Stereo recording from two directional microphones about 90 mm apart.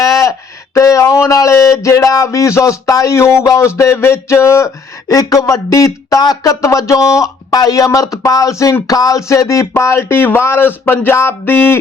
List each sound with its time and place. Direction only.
0.0 s speech: 35° left (ahead or behind)